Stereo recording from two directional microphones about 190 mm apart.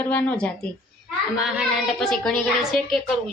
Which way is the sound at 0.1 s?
10° left (ahead or behind).